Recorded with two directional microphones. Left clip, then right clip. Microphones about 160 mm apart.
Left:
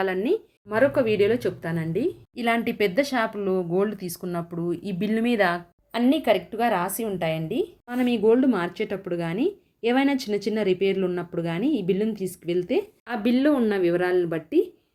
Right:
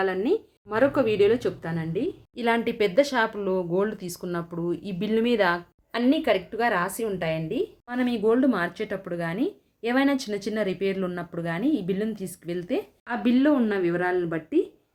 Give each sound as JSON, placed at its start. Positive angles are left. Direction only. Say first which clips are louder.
{"t": 0.0, "sound": "speech", "louder": "even", "side_deg": 20}
{"t": 1.7, "sound": "a woman's voice", "louder": "left 2 dB", "side_deg": 35}
{"t": 2.3, "sound": "speech", "louder": "right 2 dB", "side_deg": 10}